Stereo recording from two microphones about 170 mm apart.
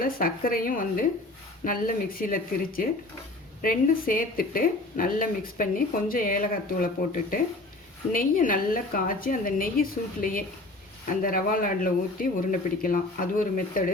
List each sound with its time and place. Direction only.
0.0 s speech: 55° left (ahead or behind)